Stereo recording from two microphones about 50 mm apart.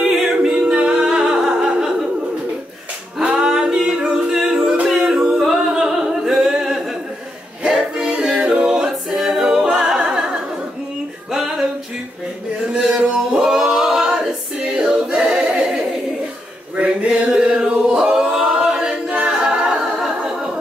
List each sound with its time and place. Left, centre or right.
0.0 s a capella: centre
0.6 s humming: centre
3.2 s singing: centre
7.6 s music: centre
8.5 s a capella: right
8.7 s a capella: centre
11.3 s music: centre
12.7 s a sound: centre
13.3 s singing: centre
14.8 s a capella: centre
16.7 s male singing: right
18.3 s a capella: centre